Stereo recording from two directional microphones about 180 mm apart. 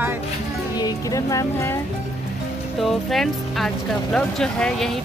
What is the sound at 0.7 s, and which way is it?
Speech, 20° left (ahead or behind).